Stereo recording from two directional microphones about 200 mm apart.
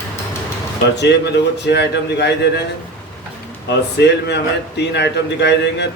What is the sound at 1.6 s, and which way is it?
Speech, 60° left (ahead or behind).